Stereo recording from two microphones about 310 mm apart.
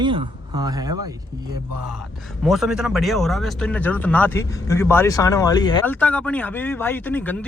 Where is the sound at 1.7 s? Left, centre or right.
Right.